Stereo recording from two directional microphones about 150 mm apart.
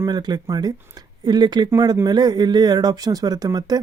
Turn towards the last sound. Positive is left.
turn(degrees=-25)  # may be behind; listen again after turning